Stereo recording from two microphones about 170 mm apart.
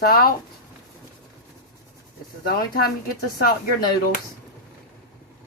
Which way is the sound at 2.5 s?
65° left (ahead or behind).